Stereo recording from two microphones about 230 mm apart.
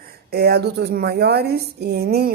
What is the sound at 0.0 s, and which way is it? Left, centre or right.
A woman's voice, right.